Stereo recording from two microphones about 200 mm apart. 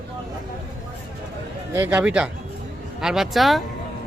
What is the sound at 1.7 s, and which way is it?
Speech, 10° right (ahead or behind).